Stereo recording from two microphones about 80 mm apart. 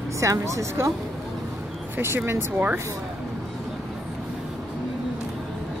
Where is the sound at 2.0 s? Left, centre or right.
Right.